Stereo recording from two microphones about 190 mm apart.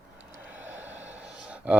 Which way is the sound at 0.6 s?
10° right (ahead or behind).